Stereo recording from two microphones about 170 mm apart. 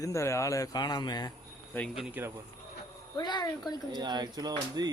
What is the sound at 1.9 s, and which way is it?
Speech, 5° right (ahead or behind).